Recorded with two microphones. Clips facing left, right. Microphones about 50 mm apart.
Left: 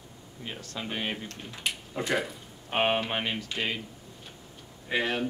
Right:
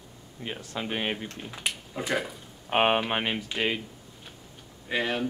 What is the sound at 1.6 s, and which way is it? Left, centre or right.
Speech, centre.